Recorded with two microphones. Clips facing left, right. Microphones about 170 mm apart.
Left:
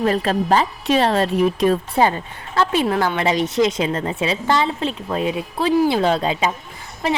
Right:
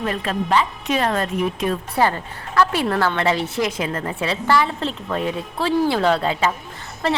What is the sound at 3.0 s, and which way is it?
A woman's voice, 15° left (ahead or behind).